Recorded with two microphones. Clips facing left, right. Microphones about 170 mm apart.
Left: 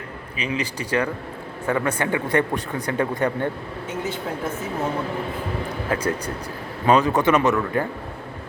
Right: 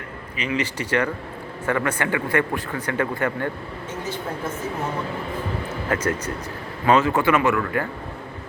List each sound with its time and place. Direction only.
0.3 s speech: 10° left (ahead or behind)
5.9 s speech: 10° left (ahead or behind)